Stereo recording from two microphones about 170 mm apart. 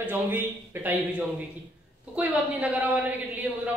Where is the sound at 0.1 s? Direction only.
10° right (ahead or behind).